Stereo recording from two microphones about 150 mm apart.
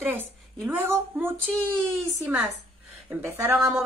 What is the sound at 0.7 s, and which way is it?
Speech, 15° right (ahead or behind).